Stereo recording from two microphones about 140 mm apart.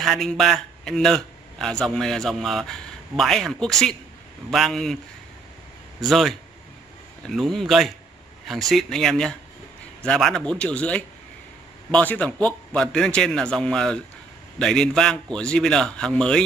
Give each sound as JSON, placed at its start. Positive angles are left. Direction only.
{"t": 0.0, "sound": "a man's voice", "side_deg": 0}
{"t": 5.9, "sound": "a man's voice", "side_deg": 0}